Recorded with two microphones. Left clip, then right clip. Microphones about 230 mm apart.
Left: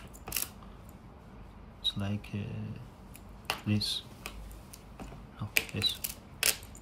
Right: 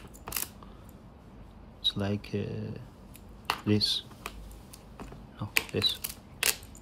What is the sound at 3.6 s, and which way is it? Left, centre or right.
Speech, right.